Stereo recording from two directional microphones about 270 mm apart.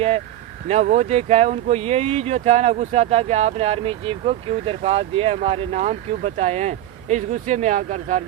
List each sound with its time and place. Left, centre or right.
0.7 s speech: right